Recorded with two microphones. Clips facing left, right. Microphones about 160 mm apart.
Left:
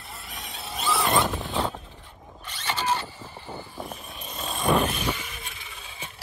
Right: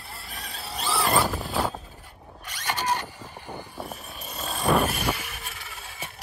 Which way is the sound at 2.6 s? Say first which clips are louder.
Even; 10° right (ahead or behind).